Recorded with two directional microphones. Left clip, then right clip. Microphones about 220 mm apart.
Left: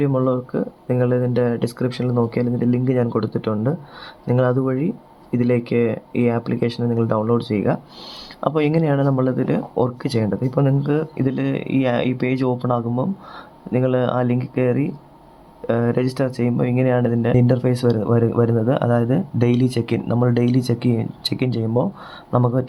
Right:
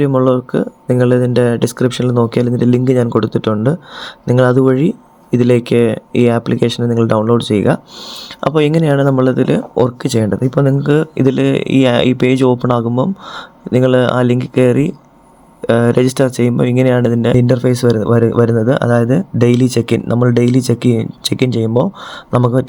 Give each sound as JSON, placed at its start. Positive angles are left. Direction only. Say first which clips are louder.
{"t": 0.0, "sound": "speech", "louder": "right 7 dB", "side_deg": -20}